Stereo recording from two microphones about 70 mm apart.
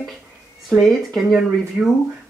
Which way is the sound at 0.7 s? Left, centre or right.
Centre.